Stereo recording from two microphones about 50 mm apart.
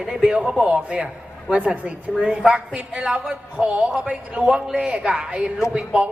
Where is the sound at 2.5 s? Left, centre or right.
Right.